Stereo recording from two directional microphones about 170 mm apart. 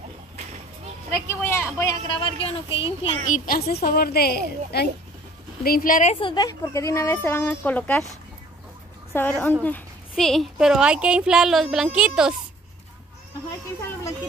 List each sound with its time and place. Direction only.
1.1 s speech: 15° left (ahead or behind); by 3.2 s 35° left (ahead or behind)
3.3 s a woman's voice: 50° left (ahead or behind)
6.1 s speech: 25° left (ahead or behind); by 8.0 s 10° left (ahead or behind)
9.4 s a woman's voice: 10° left (ahead or behind)